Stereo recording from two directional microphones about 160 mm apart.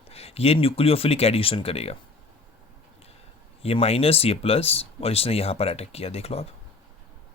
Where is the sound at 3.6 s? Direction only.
40° left (ahead or behind).